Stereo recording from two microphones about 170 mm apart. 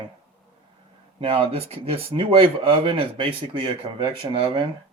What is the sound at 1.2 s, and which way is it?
Speech, 35° right (ahead or behind).